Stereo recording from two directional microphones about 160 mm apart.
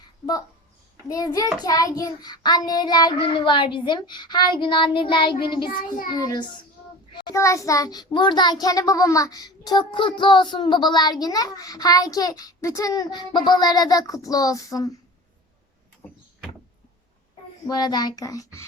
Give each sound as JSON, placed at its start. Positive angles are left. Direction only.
{"t": 1.0, "sound": "a child's voice", "side_deg": 20}
{"t": 7.1, "sound": "child singing", "side_deg": 30}
{"t": 7.3, "sound": "a child's voice", "side_deg": 20}
{"t": 16.0, "sound": "door", "side_deg": 10}
{"t": 17.7, "sound": "a child's voice", "side_deg": 25}